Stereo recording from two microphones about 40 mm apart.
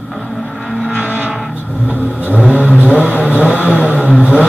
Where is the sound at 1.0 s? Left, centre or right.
Left.